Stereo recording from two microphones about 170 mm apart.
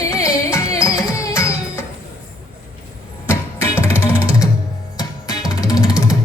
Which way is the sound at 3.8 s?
15° left (ahead or behind).